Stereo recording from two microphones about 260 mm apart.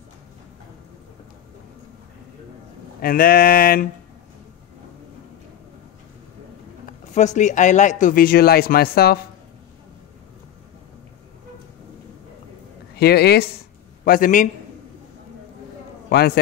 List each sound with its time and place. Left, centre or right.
3.0 s speech: left
6.9 s speech: left
12.9 s speech: left
16.1 s a man's voice: left